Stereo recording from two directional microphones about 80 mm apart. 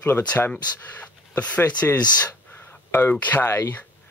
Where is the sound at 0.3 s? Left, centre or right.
Centre.